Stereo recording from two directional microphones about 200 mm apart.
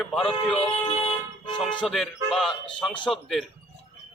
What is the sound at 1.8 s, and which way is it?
A man's voice, centre (ahead or behind).